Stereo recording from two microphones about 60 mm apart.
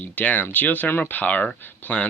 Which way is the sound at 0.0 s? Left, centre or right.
Left.